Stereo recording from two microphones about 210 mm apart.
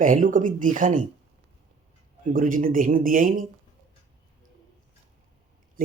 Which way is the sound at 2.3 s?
40° right (ahead or behind).